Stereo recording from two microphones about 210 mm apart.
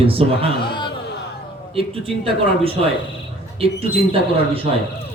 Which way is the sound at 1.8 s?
25° right (ahead or behind).